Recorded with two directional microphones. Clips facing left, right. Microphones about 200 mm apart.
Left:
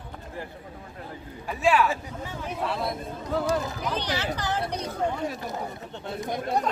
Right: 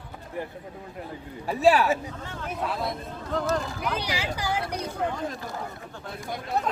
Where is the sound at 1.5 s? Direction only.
35° right (ahead or behind).